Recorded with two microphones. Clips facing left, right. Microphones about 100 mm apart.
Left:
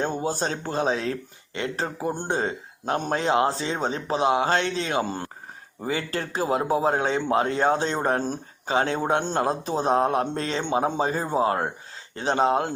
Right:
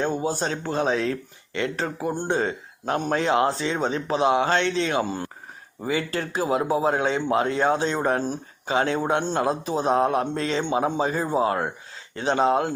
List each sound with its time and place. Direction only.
0.0 s speech: 40° left (ahead or behind)